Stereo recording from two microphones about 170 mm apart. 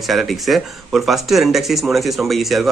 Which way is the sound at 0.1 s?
Centre (ahead or behind).